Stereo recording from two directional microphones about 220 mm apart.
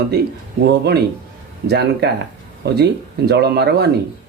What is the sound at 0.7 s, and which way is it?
Speech, 50° right (ahead or behind).